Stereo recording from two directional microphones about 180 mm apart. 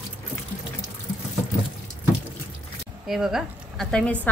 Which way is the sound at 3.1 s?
Centre (ahead or behind).